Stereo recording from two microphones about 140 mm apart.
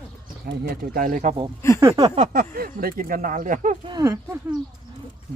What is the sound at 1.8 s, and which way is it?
Speech, 20° right (ahead or behind).